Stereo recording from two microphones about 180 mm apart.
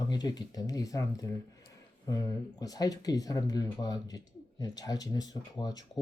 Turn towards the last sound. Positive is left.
turn(degrees=20)  # may be behind; listen again after turning